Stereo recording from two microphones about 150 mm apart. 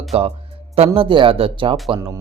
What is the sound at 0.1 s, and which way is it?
A man's voice, 40° right (ahead or behind).